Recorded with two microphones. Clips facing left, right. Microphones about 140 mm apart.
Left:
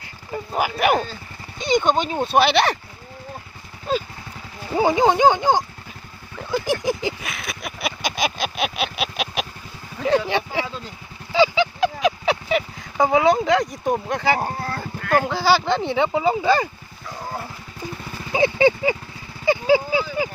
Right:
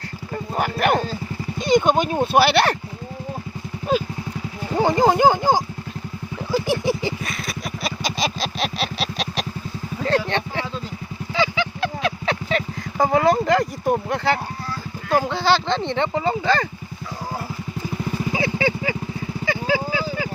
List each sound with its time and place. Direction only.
0.5 s speech: 5° left (ahead or behind)
4.7 s speech: 5° left (ahead or behind)
6.5 s a sound: centre (ahead or behind)
10.0 s speech: 5° left (ahead or behind)
11.3 s a sound: 15° left (ahead or behind)
13.0 s speech: centre (ahead or behind)
14.3 s clip-clop: 50° left (ahead or behind)
15.2 s speech: centre (ahead or behind)
18.3 s vehicle: 20° left (ahead or behind)
19.5 s a sound: 20° left (ahead or behind)